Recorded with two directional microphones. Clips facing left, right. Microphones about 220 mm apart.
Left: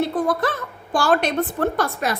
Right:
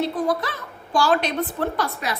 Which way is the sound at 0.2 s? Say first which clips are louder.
Left 1 dB; 55° left (ahead or behind).